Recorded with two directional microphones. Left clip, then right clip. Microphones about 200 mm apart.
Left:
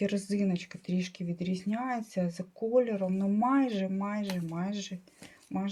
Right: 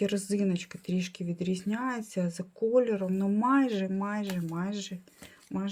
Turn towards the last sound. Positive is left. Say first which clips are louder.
# even
turn(degrees=-35)  # may be behind; listen again after turning